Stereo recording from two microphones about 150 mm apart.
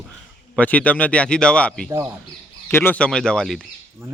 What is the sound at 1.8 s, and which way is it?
Speech, 20° right (ahead or behind).